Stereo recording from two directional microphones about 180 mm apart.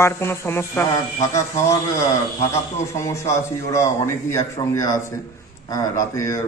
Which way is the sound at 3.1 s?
15° left (ahead or behind).